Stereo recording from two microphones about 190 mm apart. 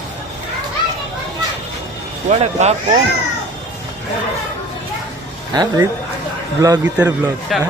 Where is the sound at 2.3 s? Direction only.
35° right (ahead or behind).